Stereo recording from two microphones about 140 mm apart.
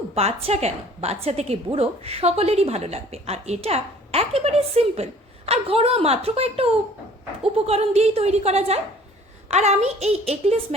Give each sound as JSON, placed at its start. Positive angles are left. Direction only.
{"t": 0.1, "sound": "a woman's voice", "side_deg": -45}